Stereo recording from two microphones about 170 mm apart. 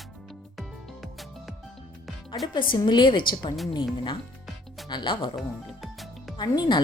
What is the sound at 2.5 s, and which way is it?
A woman's voice, 30° left (ahead or behind).